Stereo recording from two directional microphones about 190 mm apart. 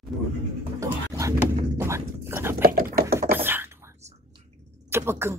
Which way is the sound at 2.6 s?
50° right (ahead or behind).